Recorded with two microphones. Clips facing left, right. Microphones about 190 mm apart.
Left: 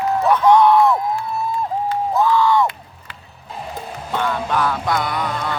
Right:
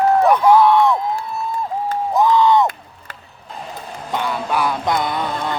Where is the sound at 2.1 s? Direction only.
20° right (ahead or behind).